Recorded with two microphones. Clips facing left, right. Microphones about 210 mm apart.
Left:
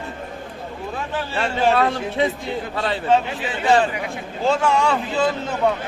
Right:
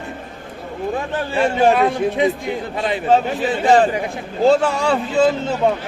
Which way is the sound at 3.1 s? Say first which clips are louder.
Right 4 dB; 40° right (ahead or behind).